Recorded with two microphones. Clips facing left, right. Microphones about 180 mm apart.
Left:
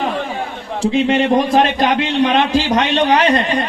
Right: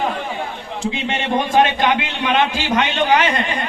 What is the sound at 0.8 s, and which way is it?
A man's voice, 35° left (ahead or behind).